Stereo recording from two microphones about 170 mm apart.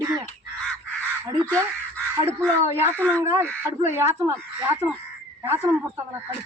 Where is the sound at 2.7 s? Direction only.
15° right (ahead or behind).